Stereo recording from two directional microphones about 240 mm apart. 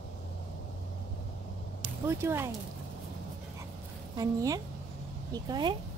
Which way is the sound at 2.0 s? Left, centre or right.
Centre.